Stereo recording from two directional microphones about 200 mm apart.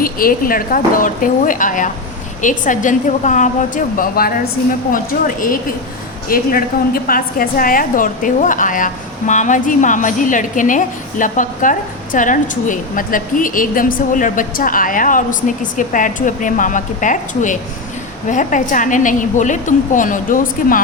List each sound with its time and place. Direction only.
0.0 s a woman's voice: 45° left (ahead or behind)